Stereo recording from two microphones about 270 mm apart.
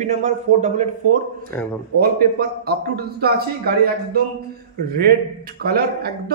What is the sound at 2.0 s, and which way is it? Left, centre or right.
A man's voice, right.